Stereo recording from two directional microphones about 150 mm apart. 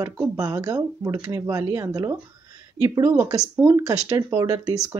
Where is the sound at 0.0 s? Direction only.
20° right (ahead or behind).